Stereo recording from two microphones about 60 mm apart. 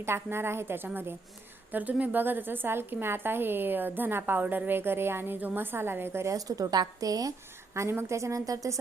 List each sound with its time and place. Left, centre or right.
0.0 s a woman's voice: right
1.7 s a woman's voice: right
6.3 s a woman's voice: right
7.7 s a woman's voice: right